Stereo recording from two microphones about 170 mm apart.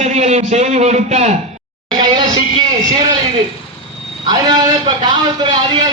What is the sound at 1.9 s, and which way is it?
A man's voice, 25° right (ahead or behind).